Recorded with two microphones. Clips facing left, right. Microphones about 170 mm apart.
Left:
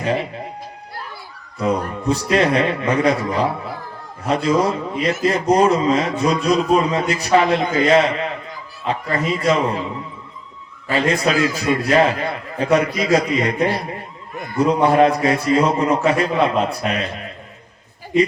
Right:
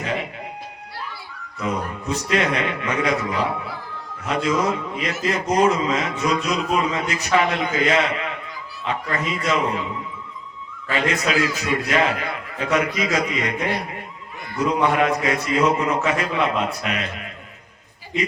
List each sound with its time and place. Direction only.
0.0 s speech: 35° left (ahead or behind)
1.5 s a man's voice: 35° left (ahead or behind)
10.8 s a man's voice: 35° left (ahead or behind)